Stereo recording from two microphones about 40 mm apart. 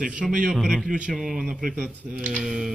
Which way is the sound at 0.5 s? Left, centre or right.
Centre.